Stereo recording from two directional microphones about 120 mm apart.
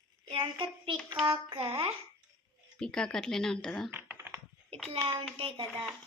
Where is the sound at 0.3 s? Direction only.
45° right (ahead or behind).